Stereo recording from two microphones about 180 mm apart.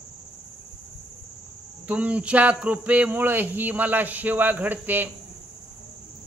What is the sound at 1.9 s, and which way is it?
Speech, 10° right (ahead or behind).